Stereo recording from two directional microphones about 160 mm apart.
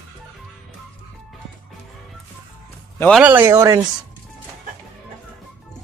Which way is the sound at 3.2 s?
10° right (ahead or behind).